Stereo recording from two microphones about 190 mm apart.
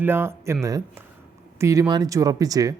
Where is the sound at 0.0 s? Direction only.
10° right (ahead or behind).